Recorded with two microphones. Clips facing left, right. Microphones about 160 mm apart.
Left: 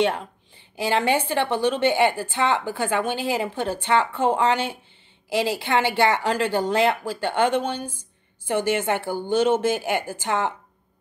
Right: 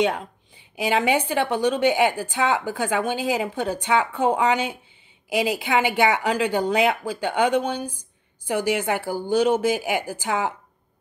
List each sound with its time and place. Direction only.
0.0 s speech: 10° right (ahead or behind)